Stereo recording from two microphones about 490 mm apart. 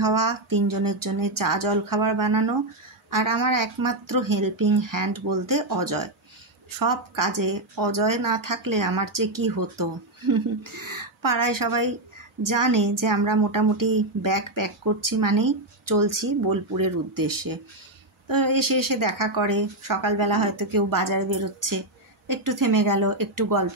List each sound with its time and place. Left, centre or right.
0.0 s speech: right